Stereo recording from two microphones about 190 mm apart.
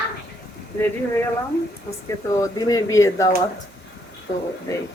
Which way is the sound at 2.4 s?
20° left (ahead or behind).